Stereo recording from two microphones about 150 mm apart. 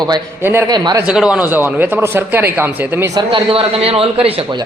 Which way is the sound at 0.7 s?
25° right (ahead or behind).